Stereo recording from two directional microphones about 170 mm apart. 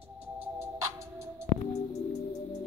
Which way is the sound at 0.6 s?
15° right (ahead or behind).